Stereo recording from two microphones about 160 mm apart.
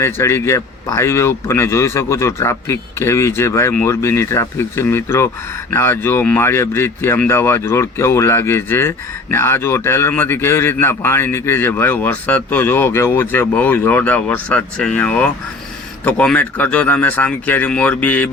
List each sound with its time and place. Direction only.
0.0 s a man's voice: 15° left (ahead or behind)